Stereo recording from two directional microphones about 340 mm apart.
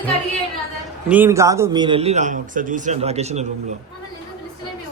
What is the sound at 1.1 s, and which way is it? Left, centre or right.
A man's voice, centre.